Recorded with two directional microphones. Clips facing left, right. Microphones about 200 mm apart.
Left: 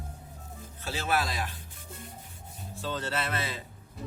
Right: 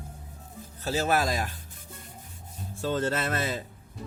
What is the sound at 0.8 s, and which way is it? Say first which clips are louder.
Speech: right 5 dB; 40° right (ahead or behind).